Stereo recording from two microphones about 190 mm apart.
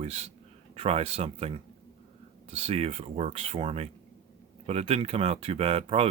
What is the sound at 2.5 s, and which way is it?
Speech, 30° right (ahead or behind).